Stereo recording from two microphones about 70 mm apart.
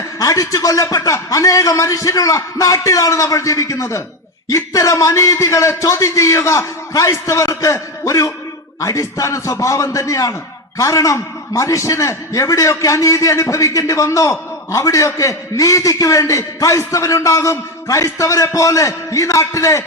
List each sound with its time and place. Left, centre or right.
0.2 s a man's voice: left